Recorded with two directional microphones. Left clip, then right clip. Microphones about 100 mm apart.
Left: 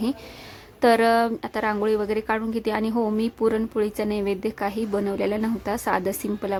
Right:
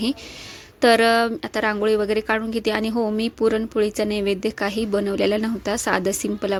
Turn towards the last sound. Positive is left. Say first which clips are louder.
# right 4 dB
turn(degrees=-20)  # may be behind; listen again after turning